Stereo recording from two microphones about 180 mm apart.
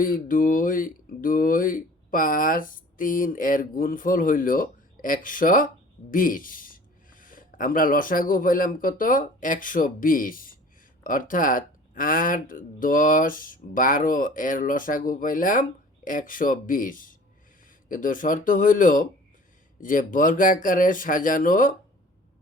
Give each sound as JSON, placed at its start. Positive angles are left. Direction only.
{"t": 0.0, "sound": "speech", "side_deg": 50}